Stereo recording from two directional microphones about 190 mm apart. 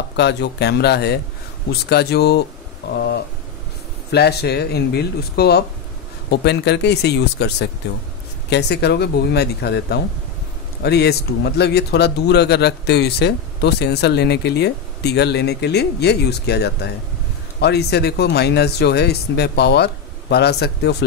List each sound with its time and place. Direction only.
0.1 s speech: 65° left (ahead or behind)